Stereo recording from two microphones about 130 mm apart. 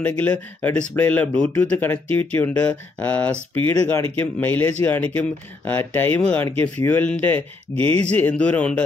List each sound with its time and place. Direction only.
0.2 s speech: 15° left (ahead or behind)